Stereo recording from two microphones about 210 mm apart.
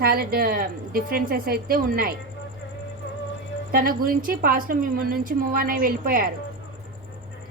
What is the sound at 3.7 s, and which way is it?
Speech, 45° right (ahead or behind).